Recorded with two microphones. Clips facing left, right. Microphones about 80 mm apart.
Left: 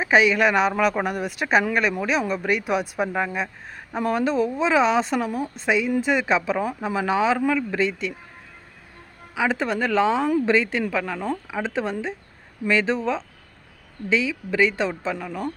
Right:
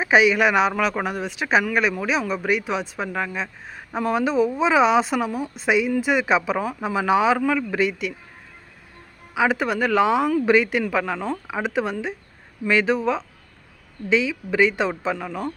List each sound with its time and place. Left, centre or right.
0.0 s speech: centre
3.8 s speech: centre
9.3 s speech: centre